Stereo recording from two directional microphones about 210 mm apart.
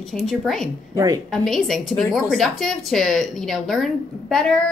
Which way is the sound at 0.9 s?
15° right (ahead or behind).